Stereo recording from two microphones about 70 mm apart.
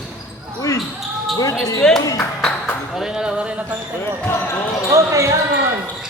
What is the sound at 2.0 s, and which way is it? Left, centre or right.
Speech, left.